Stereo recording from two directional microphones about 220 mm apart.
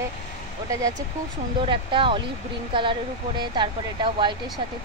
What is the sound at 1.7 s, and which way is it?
A woman's voice, 25° right (ahead or behind).